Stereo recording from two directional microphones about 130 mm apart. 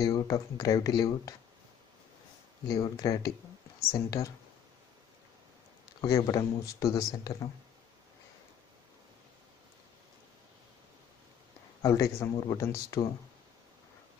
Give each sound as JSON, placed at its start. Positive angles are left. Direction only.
{"t": 0.0, "sound": "speech", "side_deg": 25}
{"t": 2.7, "sound": "speech", "side_deg": 25}
{"t": 5.9, "sound": "speech", "side_deg": 25}
{"t": 11.8, "sound": "speech", "side_deg": 25}